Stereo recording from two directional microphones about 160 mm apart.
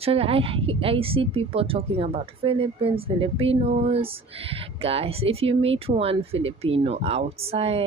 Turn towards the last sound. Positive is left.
turn(degrees=-40)  # may be behind; listen again after turning